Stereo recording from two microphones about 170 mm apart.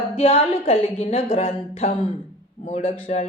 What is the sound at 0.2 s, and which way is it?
A woman's voice, 35° left (ahead or behind).